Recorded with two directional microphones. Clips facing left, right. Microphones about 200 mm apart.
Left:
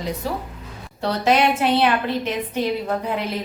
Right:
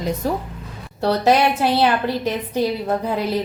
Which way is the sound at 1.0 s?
35° right (ahead or behind).